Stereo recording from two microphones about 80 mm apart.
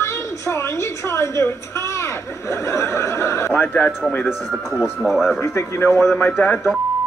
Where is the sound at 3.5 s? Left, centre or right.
Left.